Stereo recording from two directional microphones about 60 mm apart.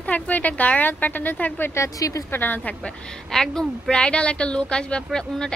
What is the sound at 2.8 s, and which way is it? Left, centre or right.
A woman's voice, centre.